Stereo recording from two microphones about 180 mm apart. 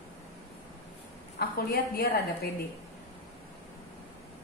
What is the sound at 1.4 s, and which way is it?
Speech, 65° left (ahead or behind).